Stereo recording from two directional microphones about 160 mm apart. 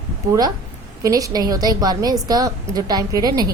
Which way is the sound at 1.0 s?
20° right (ahead or behind).